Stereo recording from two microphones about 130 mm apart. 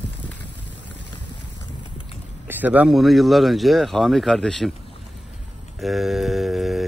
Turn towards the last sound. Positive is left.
turn(degrees=0)  # may be behind; listen again after turning